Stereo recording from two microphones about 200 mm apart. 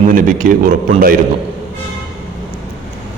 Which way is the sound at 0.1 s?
40° right (ahead or behind).